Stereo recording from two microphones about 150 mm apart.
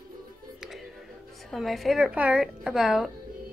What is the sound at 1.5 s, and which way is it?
A woman's voice, centre (ahead or behind).